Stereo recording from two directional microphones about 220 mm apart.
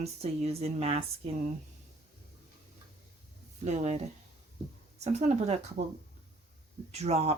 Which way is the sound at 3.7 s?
30° right (ahead or behind).